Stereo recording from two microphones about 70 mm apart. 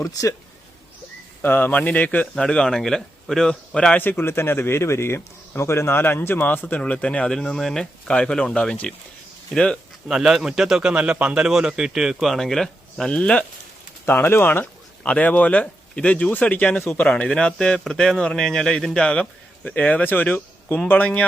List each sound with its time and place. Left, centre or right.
0.0 s speech: left
1.4 s speech: left
2.3 s speech: centre
3.9 s speech: left
10.1 s speech: centre
14.1 s speech: left
14.6 s speech: centre